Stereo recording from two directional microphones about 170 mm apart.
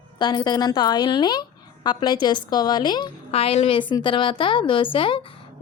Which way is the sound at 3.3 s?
35° left (ahead or behind).